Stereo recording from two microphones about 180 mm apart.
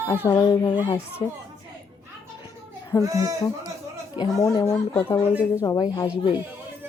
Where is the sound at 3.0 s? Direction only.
20° right (ahead or behind).